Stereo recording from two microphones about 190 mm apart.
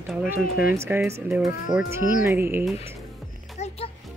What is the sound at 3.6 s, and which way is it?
Music, 35° left (ahead or behind).